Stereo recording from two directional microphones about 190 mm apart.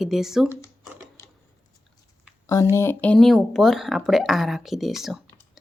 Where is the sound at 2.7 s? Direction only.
10° left (ahead or behind).